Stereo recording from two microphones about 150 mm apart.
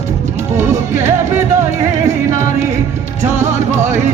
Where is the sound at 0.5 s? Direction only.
55° right (ahead or behind).